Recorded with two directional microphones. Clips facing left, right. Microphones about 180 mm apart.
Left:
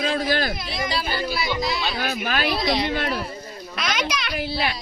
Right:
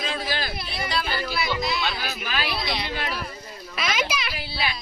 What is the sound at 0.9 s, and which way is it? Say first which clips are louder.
Speech: even; 30° left (ahead or behind).